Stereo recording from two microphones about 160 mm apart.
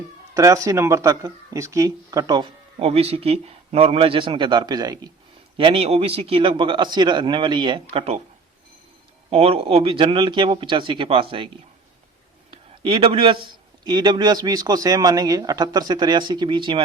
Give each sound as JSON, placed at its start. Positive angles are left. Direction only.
{"t": 0.3, "sound": "speech", "side_deg": -20}
{"t": 5.5, "sound": "speech", "side_deg": -35}
{"t": 9.3, "sound": "speech", "side_deg": -40}
{"t": 12.5, "sound": "speech", "side_deg": -35}